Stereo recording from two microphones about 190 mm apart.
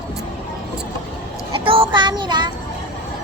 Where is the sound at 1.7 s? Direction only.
25° right (ahead or behind).